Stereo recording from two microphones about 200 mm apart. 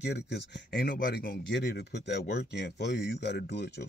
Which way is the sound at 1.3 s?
55° left (ahead or behind).